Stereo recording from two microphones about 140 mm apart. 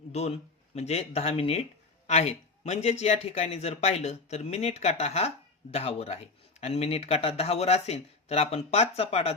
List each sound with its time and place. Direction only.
0.1 s speech: 50° left (ahead or behind)